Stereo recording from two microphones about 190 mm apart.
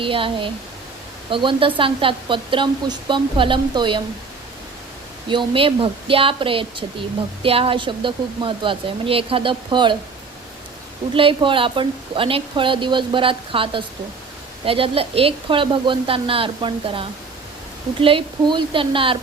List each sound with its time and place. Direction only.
0.0 s speech: 25° right (ahead or behind)
5.3 s speech: 25° right (ahead or behind)
11.1 s speech: 25° right (ahead or behind)